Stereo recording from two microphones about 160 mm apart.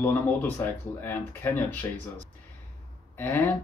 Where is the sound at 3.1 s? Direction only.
10° left (ahead or behind).